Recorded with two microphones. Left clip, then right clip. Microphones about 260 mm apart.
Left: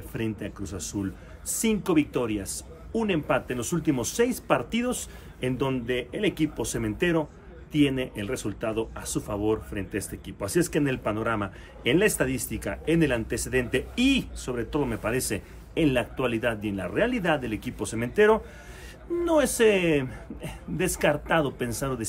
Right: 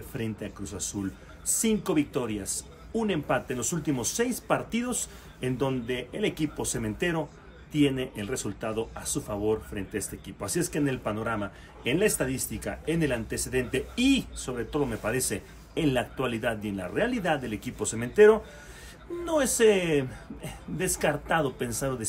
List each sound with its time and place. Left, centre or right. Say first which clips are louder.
0.1 s a man's voice: left 3 dB; centre